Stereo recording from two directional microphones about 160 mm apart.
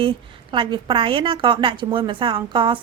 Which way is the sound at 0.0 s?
30° right (ahead or behind).